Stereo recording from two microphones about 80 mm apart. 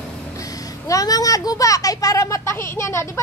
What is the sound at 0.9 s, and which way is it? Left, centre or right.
A child's voice, left.